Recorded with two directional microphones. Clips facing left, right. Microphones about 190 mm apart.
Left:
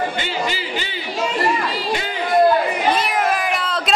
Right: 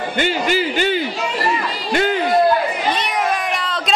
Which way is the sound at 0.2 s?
55° right (ahead or behind).